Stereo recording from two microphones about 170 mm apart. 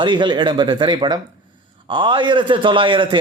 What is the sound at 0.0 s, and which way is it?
A man's voice, 25° right (ahead or behind).